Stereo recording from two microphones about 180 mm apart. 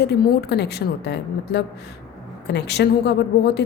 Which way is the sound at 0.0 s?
65° left (ahead or behind).